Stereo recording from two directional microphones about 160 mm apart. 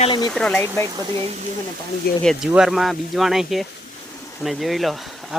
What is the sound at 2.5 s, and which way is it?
Speech, 5° right (ahead or behind).